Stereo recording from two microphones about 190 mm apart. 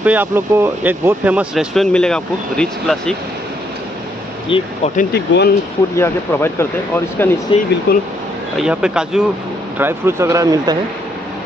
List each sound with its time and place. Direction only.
0.0 s speech: 10° right (ahead or behind)
4.5 s speech: 25° left (ahead or behind)
5.1 s speech: 60° left (ahead or behind)
5.9 s speech: 15° left (ahead or behind)
7.5 s speech: 25° left (ahead or behind)
7.9 s speech: 55° left (ahead or behind)
8.5 s speech: 5° right (ahead or behind); by 10.8 s 20° right (ahead or behind)